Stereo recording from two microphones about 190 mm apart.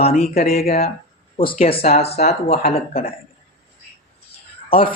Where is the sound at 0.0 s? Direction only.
35° left (ahead or behind).